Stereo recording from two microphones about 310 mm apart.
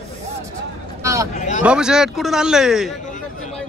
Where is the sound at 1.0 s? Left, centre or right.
Centre.